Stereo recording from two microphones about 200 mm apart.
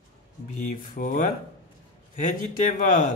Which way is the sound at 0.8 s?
40° left (ahead or behind).